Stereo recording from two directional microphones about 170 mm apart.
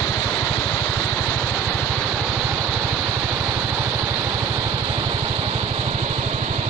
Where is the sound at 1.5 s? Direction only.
5° left (ahead or behind); by 6.3 s 35° right (ahead or behind).